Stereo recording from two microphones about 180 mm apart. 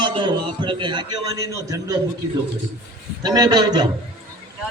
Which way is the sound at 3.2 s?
20° right (ahead or behind).